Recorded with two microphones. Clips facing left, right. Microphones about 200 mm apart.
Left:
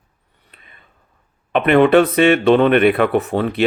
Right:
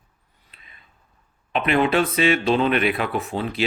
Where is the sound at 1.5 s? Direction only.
55° left (ahead or behind).